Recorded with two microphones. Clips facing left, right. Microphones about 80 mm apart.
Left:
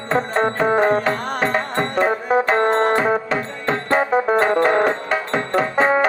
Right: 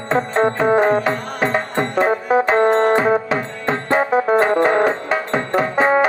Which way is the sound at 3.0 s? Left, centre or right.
Centre.